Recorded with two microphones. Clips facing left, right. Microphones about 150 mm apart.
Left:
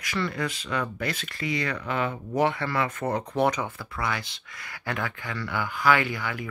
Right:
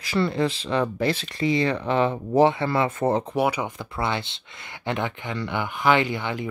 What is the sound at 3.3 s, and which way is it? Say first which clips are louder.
Speech: right 1 dB; 10° right (ahead or behind).